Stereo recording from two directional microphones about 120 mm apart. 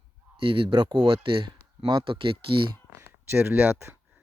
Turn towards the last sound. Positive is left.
turn(degrees=-20)  # may be behind; listen again after turning